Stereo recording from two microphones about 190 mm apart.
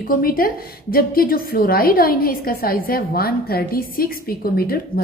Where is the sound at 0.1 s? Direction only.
50° left (ahead or behind).